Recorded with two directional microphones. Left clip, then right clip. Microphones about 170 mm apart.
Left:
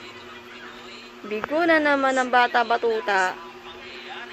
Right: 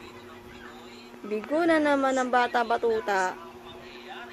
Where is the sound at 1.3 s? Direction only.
15° right (ahead or behind).